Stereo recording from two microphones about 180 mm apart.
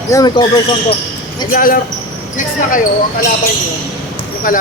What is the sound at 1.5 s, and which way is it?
Speech, 50° left (ahead or behind).